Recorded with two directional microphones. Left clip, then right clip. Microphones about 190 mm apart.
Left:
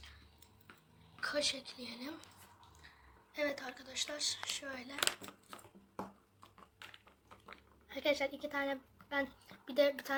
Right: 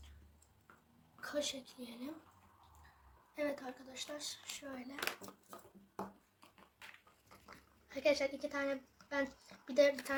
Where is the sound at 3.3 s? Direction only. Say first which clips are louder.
Left 2 dB; 10° left (ahead or behind).